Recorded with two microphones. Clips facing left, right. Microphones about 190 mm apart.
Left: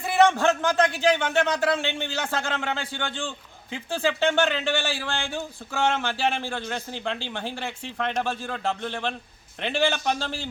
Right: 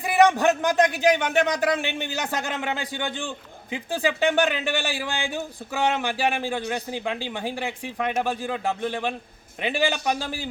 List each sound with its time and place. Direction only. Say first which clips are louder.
0.0 s speech: right 1 dB; 15° right (ahead or behind)